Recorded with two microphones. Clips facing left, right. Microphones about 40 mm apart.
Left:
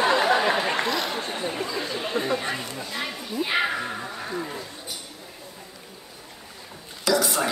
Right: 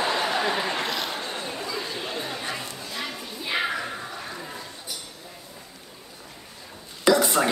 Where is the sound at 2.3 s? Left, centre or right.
Left.